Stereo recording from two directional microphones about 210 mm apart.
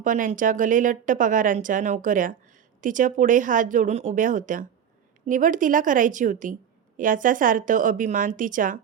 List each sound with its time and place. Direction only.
0.0 s a woman's voice: 40° right (ahead or behind)